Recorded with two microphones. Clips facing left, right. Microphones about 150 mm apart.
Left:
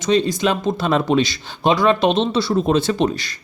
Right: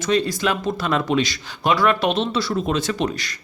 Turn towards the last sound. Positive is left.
turn(degrees=30)  # may be behind; listen again after turning